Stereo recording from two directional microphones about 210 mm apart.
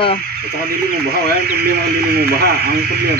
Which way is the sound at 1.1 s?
50° right (ahead or behind).